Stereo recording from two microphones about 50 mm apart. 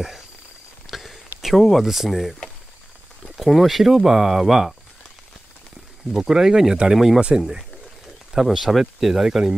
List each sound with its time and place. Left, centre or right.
0.8 s a sound: centre
1.9 s speech: centre
3.3 s speech: centre
6.1 s speech: centre
8.3 s speech: centre